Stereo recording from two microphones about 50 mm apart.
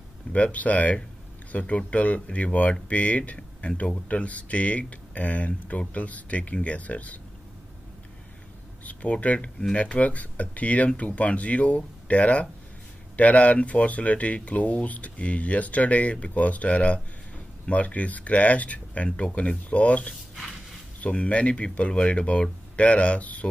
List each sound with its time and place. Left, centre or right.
0.3 s speech: left
8.8 s speech: left